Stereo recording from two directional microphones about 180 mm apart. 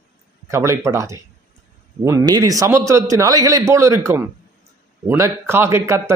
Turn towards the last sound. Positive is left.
turn(degrees=-15)  # may be behind; listen again after turning